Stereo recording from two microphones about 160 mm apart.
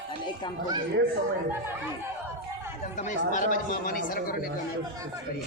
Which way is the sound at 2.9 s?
50° left (ahead or behind).